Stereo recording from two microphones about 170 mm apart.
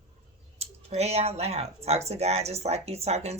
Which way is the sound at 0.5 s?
40° right (ahead or behind).